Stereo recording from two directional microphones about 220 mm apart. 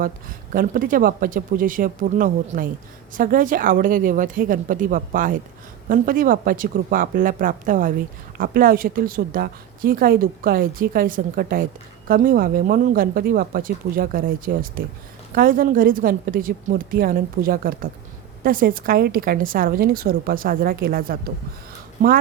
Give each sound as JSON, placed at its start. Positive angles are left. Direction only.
{"t": 0.0, "sound": "speech", "side_deg": -40}